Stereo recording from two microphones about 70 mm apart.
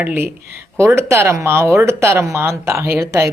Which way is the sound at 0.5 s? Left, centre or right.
Right.